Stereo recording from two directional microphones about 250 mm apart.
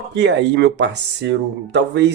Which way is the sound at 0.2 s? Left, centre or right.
Right.